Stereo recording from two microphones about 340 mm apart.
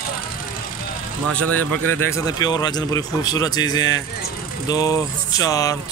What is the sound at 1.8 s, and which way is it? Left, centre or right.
Speech, right.